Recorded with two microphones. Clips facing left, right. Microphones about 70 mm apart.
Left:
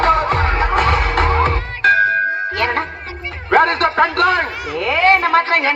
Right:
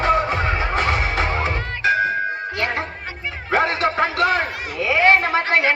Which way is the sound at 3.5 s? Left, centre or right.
Left.